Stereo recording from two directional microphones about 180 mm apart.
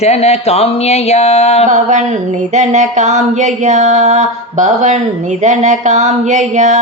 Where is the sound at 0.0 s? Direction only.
35° left (ahead or behind).